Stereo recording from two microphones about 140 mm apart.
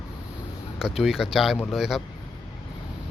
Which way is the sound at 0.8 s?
5° right (ahead or behind).